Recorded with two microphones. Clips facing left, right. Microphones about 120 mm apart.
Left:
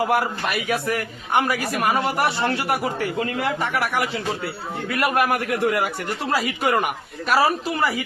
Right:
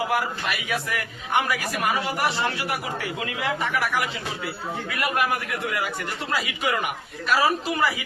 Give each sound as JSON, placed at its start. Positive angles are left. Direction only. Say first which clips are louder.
{"t": 0.0, "sound": "a man's voice", "louder": "left 4 dB", "side_deg": 50}